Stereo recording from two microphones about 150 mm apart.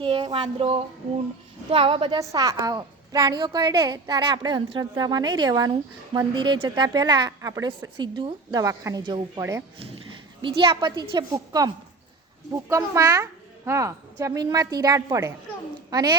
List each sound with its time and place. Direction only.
0.0 s a sound: 35° right (ahead or behind)
0.4 s a woman's voice: 40° right (ahead or behind)
2.1 s a woman's voice: 20° right (ahead or behind)
9.4 s speech: 15° right (ahead or behind)
10.4 s a woman's voice: 35° right (ahead or behind)